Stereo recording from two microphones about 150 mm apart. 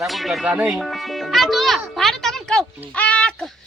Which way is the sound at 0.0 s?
Centre (ahead or behind).